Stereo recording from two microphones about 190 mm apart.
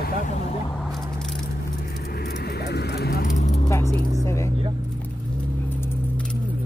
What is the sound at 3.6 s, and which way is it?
Vehicle, 15° left (ahead or behind).